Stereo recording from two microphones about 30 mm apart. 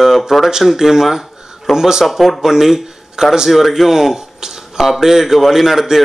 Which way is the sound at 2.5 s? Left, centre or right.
Centre.